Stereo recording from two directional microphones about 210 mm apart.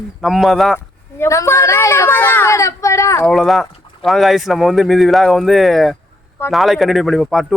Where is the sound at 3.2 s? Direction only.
Centre (ahead or behind).